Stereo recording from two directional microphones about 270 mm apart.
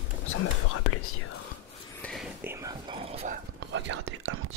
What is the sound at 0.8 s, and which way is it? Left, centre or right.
Whispering, left.